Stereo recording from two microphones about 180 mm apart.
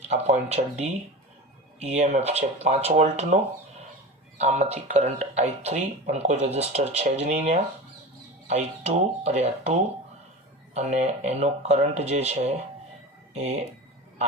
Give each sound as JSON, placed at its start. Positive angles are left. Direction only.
{"t": 0.1, "sound": "speech", "side_deg": -35}
{"t": 2.0, "sound": "speech", "side_deg": -35}
{"t": 10.8, "sound": "speech", "side_deg": -40}